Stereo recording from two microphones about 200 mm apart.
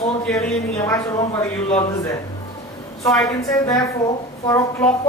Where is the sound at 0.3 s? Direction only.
5° left (ahead or behind).